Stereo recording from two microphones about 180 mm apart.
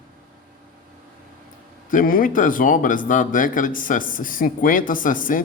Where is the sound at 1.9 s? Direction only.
50° left (ahead or behind).